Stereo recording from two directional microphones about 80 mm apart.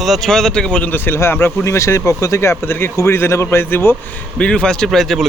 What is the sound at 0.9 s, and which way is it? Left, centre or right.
Speech, left.